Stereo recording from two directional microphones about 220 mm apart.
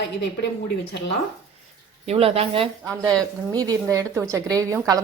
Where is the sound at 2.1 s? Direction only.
25° right (ahead or behind).